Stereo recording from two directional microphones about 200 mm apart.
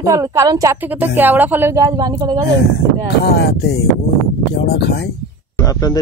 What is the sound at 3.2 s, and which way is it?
Speech, 55° left (ahead or behind).